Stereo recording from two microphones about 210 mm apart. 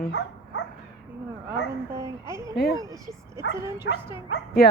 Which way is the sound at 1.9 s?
15° right (ahead or behind).